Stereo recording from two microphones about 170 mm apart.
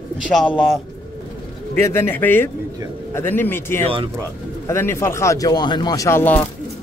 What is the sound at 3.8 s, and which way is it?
Speech, 30° right (ahead or behind).